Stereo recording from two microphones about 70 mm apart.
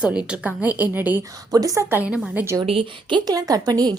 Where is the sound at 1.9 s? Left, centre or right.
Right.